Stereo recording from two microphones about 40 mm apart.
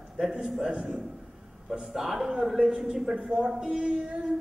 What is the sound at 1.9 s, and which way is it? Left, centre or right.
Speech, centre.